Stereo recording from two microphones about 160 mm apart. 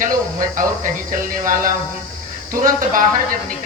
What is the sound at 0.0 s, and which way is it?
Speech, 55° right (ahead or behind).